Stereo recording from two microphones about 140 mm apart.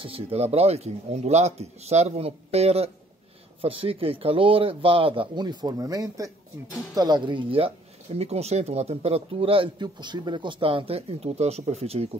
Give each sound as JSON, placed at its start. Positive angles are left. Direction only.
{"t": 0.0, "sound": "speech", "side_deg": -45}